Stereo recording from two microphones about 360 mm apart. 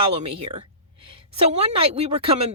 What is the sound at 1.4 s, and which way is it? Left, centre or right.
Speech, centre.